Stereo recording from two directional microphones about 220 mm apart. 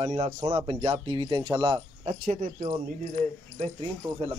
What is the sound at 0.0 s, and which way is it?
Speech, 30° right (ahead or behind).